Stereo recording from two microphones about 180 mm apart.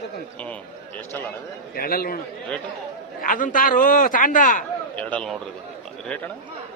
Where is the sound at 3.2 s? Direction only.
50° left (ahead or behind).